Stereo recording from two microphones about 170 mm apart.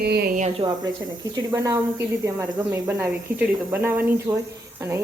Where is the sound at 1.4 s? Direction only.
20° right (ahead or behind).